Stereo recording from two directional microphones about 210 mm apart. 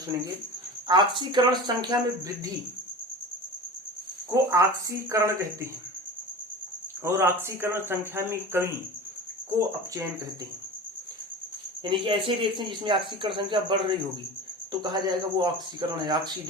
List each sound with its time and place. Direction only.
0.9 s speech: 20° right (ahead or behind)
4.3 s speech: 15° right (ahead or behind)
7.0 s speech: 10° right (ahead or behind)
11.8 s speech: 25° right (ahead or behind)